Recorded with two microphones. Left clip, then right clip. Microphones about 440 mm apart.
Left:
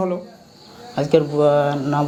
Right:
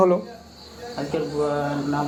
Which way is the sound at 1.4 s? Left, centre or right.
Left.